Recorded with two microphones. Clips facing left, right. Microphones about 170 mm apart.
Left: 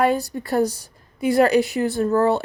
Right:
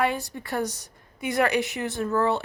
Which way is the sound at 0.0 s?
40° left (ahead or behind).